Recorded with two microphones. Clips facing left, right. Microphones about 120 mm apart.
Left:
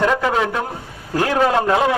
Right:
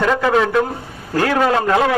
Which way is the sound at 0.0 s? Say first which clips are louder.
Right 2 dB; 15° left (ahead or behind).